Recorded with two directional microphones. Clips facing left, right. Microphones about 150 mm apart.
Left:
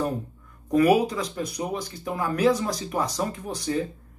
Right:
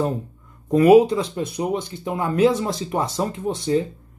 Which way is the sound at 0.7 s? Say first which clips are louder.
Right 7 dB; 25° right (ahead or behind).